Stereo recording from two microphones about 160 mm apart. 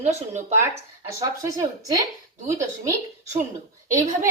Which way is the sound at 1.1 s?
20° right (ahead or behind).